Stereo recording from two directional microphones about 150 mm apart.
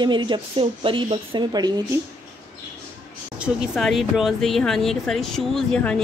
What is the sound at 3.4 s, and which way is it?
Speech, centre (ahead or behind).